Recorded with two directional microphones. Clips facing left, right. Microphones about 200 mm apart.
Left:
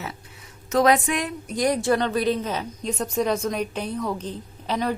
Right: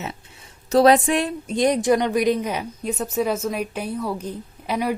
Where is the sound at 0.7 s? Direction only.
30° right (ahead or behind).